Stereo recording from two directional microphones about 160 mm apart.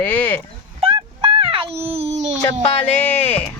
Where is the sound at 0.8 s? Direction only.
35° right (ahead or behind).